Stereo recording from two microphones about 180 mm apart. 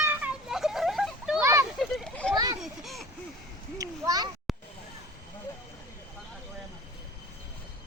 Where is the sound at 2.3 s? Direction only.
20° right (ahead or behind).